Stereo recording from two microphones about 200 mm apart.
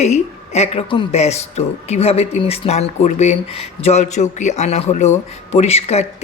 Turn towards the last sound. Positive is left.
turn(degrees=30)  # may be behind; listen again after turning